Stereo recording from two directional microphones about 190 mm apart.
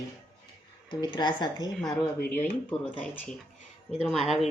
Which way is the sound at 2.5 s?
10° left (ahead or behind).